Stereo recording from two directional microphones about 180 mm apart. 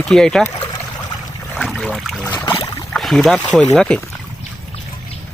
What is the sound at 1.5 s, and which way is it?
Trickle, centre (ahead or behind).